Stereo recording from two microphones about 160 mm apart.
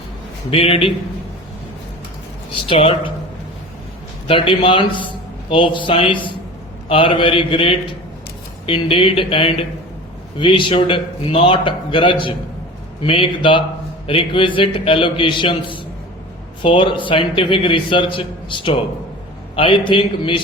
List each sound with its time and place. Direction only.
0.5 s a man's voice: 35° left (ahead or behind)
2.6 s a man's voice: 35° left (ahead or behind)
4.3 s a man's voice: 30° left (ahead or behind)